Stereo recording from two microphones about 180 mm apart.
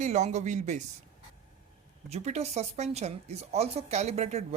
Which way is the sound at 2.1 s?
35° right (ahead or behind).